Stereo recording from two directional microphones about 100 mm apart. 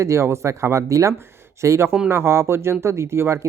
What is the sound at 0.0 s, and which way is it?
Speech, 30° right (ahead or behind).